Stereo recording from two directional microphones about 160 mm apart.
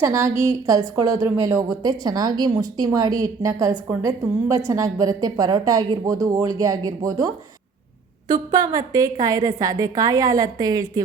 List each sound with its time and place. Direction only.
0.0 s a woman's voice: 20° right (ahead or behind)
8.3 s a woman's voice: 25° right (ahead or behind)